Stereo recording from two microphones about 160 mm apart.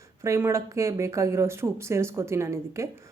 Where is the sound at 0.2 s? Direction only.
15° right (ahead or behind).